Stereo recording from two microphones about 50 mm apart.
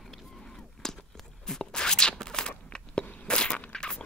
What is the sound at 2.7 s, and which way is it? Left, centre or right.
Biting, centre.